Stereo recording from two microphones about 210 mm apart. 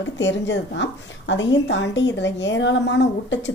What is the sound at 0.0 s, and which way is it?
A woman's voice, 60° left (ahead or behind).